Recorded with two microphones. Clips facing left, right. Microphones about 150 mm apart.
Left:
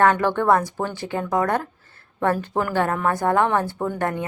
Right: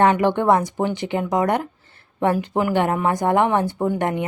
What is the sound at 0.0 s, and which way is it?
Speech, 15° right (ahead or behind).